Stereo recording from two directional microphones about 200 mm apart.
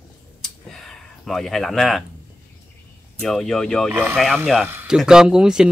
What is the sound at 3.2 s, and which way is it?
Speech, centre (ahead or behind).